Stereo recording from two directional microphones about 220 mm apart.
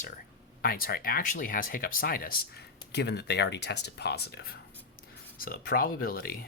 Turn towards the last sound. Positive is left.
turn(degrees=40)  # may be behind; listen again after turning